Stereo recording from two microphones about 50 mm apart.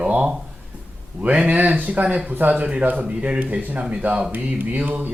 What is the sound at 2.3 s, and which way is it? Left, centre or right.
Speech, right.